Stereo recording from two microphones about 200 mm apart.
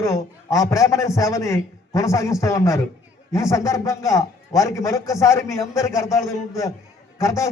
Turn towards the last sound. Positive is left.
turn(degrees=15)  # may be behind; listen again after turning